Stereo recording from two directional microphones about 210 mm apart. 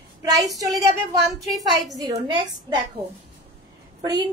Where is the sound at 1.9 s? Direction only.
20° right (ahead or behind).